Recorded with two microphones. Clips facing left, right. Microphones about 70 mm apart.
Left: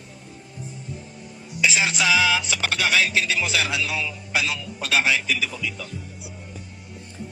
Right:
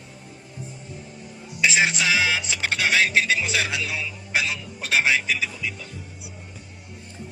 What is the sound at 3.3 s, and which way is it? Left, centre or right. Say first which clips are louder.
A man's voice: even; left.